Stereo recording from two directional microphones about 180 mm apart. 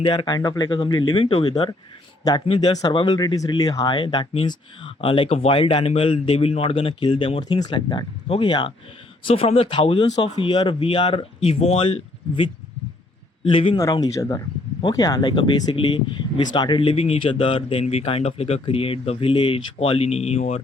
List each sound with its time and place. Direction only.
0.0 s speech: 25° left (ahead or behind)